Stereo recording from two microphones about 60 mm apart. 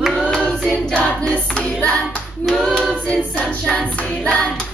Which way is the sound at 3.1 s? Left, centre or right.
Centre.